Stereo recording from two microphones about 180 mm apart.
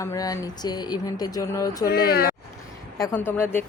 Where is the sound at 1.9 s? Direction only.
60° left (ahead or behind).